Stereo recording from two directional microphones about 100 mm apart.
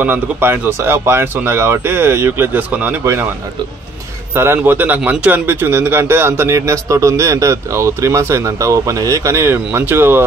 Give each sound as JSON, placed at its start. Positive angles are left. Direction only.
{"t": 0.0, "sound": "speech", "side_deg": -20}
{"t": 4.4, "sound": "speech", "side_deg": -25}